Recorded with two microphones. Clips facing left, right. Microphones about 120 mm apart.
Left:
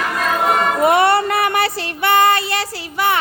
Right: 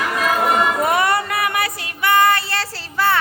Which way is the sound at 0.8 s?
25° left (ahead or behind).